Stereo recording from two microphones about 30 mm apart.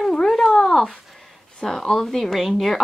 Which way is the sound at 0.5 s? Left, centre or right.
Centre.